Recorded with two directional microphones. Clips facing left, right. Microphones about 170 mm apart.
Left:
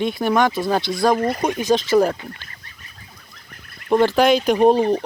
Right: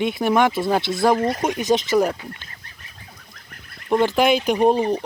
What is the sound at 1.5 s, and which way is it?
Speech, 20° right (ahead or behind).